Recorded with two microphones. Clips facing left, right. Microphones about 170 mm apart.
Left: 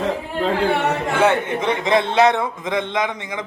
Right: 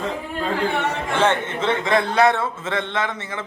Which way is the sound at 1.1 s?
10° left (ahead or behind).